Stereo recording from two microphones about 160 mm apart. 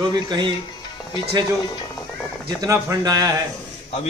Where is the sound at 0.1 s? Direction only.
25° right (ahead or behind).